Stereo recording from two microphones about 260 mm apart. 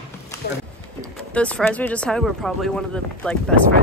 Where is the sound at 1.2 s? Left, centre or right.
Centre.